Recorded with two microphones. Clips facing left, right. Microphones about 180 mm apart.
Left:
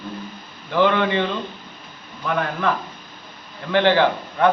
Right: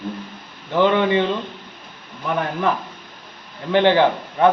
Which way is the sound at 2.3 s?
20° right (ahead or behind).